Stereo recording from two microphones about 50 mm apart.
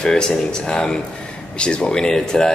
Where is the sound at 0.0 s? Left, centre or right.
Centre.